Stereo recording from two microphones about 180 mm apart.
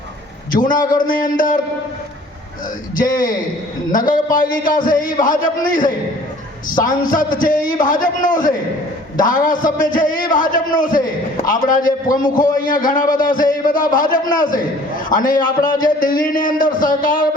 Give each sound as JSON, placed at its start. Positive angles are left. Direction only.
{"t": 0.5, "sound": "a man's voice", "side_deg": 50}
{"t": 3.0, "sound": "a man's voice", "side_deg": 50}